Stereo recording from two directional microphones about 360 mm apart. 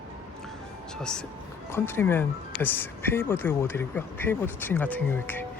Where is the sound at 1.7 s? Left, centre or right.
Centre.